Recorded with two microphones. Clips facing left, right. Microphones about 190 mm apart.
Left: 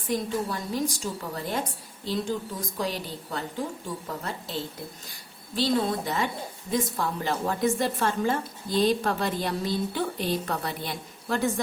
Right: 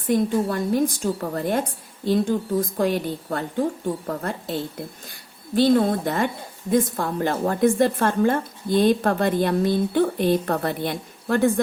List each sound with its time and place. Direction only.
0.1 s a woman's voice: 55° right (ahead or behind)
5.5 s a woman's voice: 55° right (ahead or behind)